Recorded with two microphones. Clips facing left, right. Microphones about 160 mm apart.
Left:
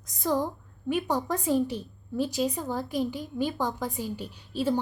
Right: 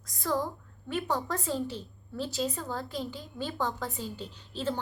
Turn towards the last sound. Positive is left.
turn(degrees=10)  # may be behind; listen again after turning